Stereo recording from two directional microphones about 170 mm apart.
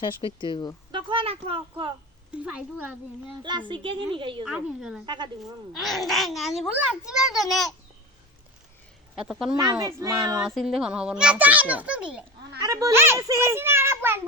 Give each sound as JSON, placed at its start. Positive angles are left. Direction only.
{"t": 0.0, "sound": "speech", "side_deg": 30}
{"t": 0.9, "sound": "a sound", "side_deg": -30}
{"t": 2.3, "sound": "a child's voice", "side_deg": -5}
{"t": 3.7, "sound": "a woman's voice", "side_deg": -30}
{"t": 4.4, "sound": "a child's voice", "side_deg": -5}
{"t": 5.0, "sound": "a woman's voice", "side_deg": -25}
{"t": 5.4, "sound": "a child's voice", "side_deg": 0}
{"t": 9.1, "sound": "a child's voice", "side_deg": -5}
{"t": 9.6, "sound": "a woman's voice", "side_deg": -20}
{"t": 10.3, "sound": "a child's voice", "side_deg": 0}
{"t": 12.6, "sound": "a child's voice", "side_deg": -20}